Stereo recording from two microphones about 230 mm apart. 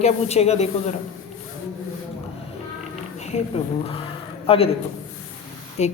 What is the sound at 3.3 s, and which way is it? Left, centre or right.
A man's voice, left.